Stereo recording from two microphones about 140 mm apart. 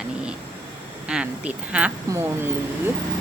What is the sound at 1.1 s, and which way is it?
Speech, 10° right (ahead or behind).